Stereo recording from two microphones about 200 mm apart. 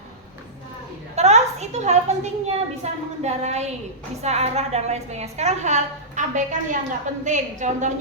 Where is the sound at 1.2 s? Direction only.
35° right (ahead or behind).